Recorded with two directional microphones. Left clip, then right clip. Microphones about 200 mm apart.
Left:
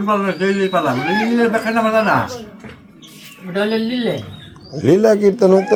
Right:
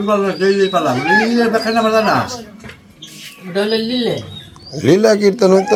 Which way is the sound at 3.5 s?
Centre (ahead or behind).